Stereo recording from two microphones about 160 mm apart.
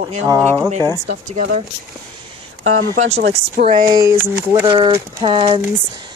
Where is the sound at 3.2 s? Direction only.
70° right (ahead or behind).